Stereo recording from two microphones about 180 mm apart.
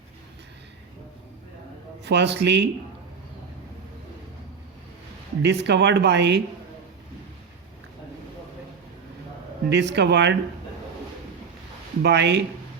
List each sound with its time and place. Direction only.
2.0 s speech: 70° right (ahead or behind)
5.4 s speech: 70° right (ahead or behind)
9.6 s speech: 75° right (ahead or behind)
12.0 s speech: 70° right (ahead or behind)